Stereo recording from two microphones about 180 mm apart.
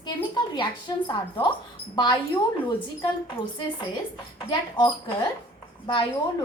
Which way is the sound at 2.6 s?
25° left (ahead or behind).